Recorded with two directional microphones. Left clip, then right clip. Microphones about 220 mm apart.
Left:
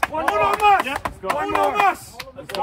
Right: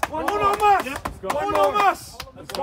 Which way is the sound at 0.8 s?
5° left (ahead or behind).